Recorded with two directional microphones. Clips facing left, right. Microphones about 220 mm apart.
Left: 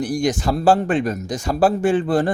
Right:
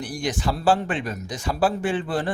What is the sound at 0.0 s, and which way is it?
Speech, 45° left (ahead or behind).